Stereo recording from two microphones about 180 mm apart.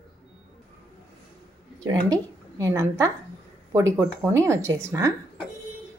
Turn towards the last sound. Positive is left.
turn(degrees=-15)  # may be behind; listen again after turning